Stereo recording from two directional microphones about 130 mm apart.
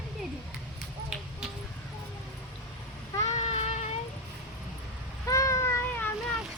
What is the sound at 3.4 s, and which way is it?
Child singing, 60° left (ahead or behind).